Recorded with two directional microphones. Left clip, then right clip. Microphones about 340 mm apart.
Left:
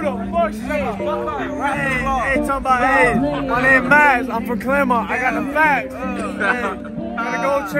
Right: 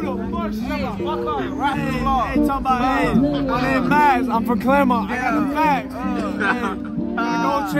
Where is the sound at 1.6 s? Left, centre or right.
Centre.